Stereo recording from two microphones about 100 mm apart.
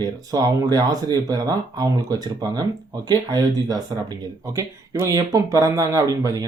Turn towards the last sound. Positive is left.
turn(degrees=-35)  # may be behind; listen again after turning